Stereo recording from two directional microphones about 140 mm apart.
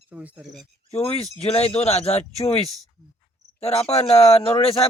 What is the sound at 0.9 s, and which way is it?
Speech, 45° left (ahead or behind).